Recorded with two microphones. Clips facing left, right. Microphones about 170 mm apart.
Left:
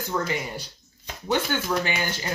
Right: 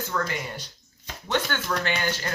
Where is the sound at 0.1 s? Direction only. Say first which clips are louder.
Left 1 dB; 25° left (ahead or behind).